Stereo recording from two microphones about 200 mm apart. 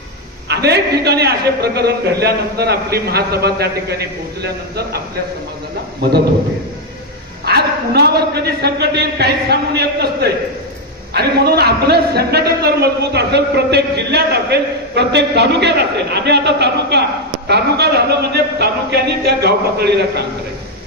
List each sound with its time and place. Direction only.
0.5 s a man's voice: 55° right (ahead or behind)
7.4 s a man's voice: 55° right (ahead or behind)